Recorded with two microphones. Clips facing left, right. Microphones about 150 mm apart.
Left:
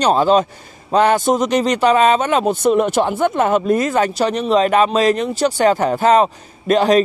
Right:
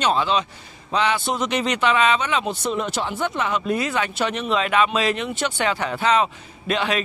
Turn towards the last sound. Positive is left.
turn(degrees=40)  # may be behind; listen again after turning